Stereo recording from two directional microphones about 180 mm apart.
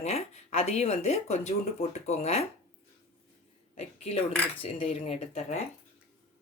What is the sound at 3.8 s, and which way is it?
Speech, 35° left (ahead or behind).